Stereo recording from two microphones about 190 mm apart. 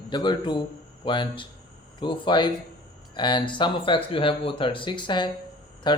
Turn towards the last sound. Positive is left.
turn(degrees=25)  # may be behind; listen again after turning